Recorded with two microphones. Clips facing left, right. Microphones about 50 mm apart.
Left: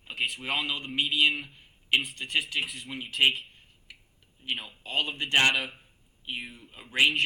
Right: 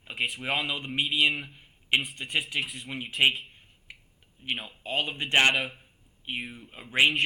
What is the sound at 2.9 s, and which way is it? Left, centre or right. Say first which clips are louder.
Speech: right 2 dB; right.